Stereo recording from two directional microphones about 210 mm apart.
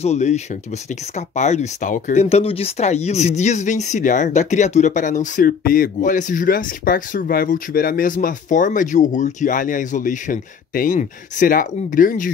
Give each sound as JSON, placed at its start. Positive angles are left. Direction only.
{"t": 0.0, "sound": "speech", "side_deg": 30}